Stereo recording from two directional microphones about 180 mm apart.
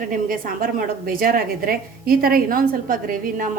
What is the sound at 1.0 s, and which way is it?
A woman's voice, 55° right (ahead or behind).